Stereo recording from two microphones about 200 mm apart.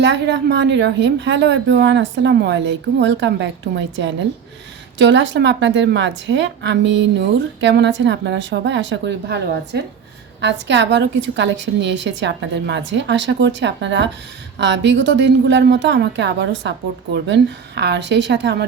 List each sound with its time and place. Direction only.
0.0 s a woman's voice: 60° right (ahead or behind)